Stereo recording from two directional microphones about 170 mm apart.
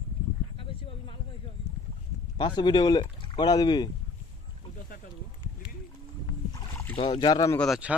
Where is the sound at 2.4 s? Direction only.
25° left (ahead or behind).